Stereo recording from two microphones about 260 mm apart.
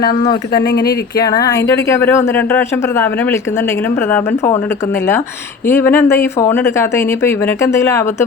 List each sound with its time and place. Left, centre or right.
0.6 s speech: left
1.2 s speech: centre
5.6 s speech: centre